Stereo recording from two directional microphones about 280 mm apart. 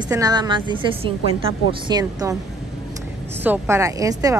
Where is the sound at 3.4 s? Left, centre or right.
Centre.